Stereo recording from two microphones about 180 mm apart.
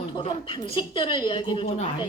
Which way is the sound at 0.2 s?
30° left (ahead or behind).